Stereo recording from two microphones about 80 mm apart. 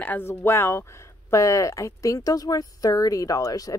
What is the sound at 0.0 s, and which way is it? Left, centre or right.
Speech, left.